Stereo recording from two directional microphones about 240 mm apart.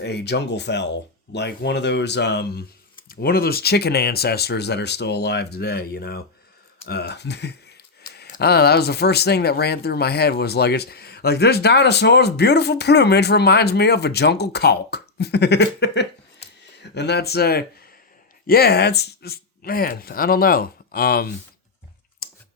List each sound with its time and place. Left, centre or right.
0.0 s speech: left
22.2 s clicking: left